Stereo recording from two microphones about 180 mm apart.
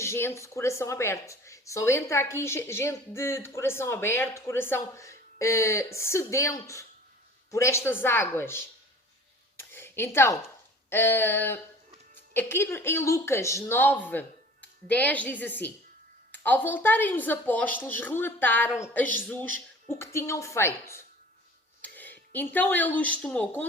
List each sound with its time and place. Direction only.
0.0 s a woman's voice: 15° left (ahead or behind)
9.6 s a sound: 15° left (ahead or behind)
10.8 s a woman's voice: 10° left (ahead or behind)